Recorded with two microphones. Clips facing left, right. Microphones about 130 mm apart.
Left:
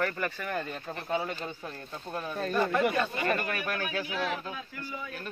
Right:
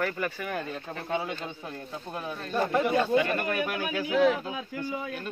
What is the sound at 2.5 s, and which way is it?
Speech, 25° right (ahead or behind).